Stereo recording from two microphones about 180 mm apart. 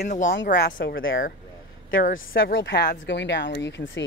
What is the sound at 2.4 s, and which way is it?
Speech, 70° left (ahead or behind).